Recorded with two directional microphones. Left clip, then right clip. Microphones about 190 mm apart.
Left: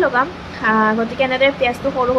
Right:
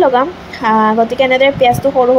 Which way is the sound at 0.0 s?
20° right (ahead or behind).